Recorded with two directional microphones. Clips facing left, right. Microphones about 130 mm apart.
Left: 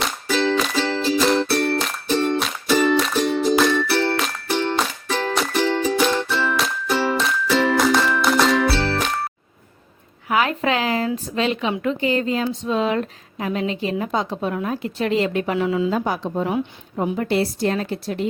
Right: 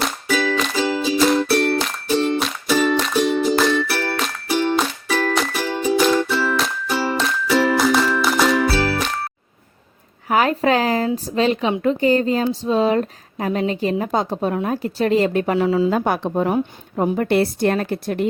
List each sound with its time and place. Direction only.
0.0 s music: 10° right (ahead or behind)
8.7 s jingle: 10° right (ahead or behind)
10.2 s speech: 40° right (ahead or behind)
15.9 s a woman's voice: 55° right (ahead or behind)